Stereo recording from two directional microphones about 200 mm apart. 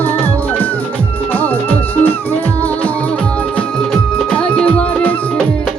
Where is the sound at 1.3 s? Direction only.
10° left (ahead or behind).